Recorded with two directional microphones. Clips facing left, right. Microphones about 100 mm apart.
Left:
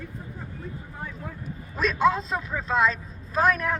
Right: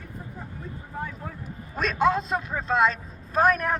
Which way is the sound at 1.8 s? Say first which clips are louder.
Even; 50° right (ahead or behind).